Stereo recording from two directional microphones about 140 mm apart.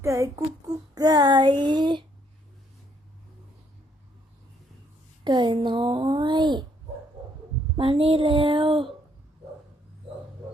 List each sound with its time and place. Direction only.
0.0 s a child's voice: 20° right (ahead or behind)
5.2 s a child's voice: 35° right (ahead or behind)
7.8 s a child's voice: 40° right (ahead or behind)